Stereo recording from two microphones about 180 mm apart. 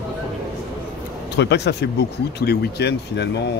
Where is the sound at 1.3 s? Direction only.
70° left (ahead or behind).